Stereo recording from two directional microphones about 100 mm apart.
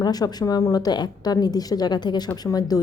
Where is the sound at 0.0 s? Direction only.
40° left (ahead or behind).